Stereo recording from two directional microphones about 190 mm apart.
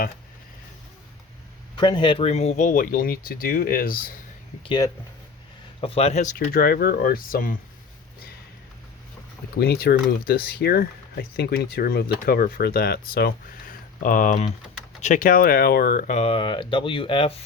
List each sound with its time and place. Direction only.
1.7 s speech: 25° left (ahead or behind); by 4.1 s 50° left (ahead or behind)
4.6 s speech: 25° left (ahead or behind)
6.5 s speech: 55° left (ahead or behind)
9.6 s speech: 55° left (ahead or behind); by 17.4 s 30° left (ahead or behind)